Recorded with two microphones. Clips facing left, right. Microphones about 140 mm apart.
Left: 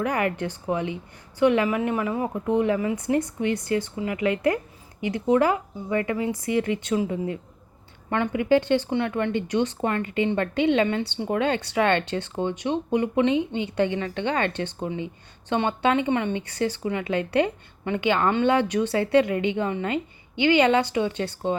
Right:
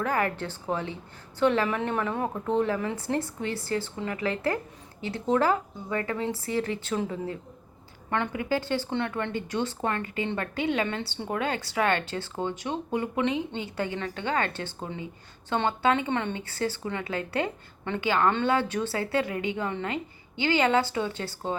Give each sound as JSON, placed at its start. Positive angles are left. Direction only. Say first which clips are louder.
{"t": 0.0, "sound": "speech", "louder": "left 3 dB", "side_deg": 15}
{"t": 8.1, "sound": "speech", "louder": "left 7 dB", "side_deg": 15}